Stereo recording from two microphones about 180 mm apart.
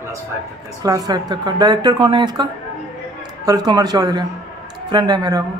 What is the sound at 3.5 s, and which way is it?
Speech, 20° right (ahead or behind).